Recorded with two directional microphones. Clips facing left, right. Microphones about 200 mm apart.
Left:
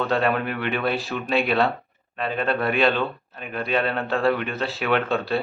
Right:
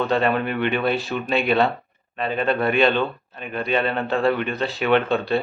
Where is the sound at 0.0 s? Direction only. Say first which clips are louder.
Right 2 dB; centre (ahead or behind).